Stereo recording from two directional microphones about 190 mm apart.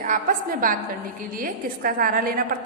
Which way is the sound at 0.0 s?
45° right (ahead or behind).